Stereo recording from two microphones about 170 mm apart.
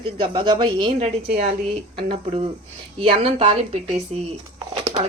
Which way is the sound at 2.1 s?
35° right (ahead or behind).